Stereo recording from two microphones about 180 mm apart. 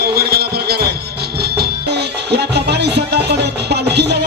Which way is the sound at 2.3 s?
70° right (ahead or behind).